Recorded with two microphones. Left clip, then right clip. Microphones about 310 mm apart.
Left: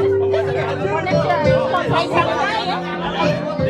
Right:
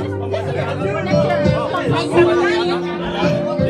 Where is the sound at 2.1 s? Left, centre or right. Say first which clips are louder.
Right 3 dB; left.